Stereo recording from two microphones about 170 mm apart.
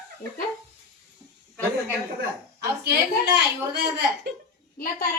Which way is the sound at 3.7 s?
80° right.